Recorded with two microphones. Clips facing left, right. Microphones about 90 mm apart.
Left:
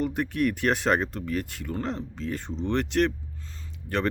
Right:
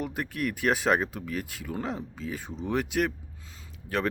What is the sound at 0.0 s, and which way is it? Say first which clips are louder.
Speech: left 5 dB; centre (ahead or behind).